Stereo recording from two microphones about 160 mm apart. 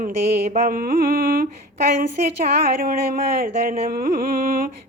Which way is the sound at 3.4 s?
70° right (ahead or behind).